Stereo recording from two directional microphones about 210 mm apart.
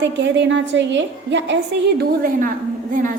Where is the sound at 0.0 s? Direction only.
55° right (ahead or behind).